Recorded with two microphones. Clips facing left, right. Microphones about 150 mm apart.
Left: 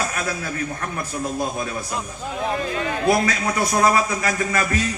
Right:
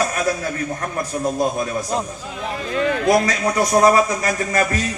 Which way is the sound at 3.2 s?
35° right (ahead or behind).